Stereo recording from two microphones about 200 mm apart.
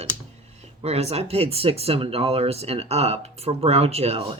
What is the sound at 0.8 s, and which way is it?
Speech, 30° right (ahead or behind).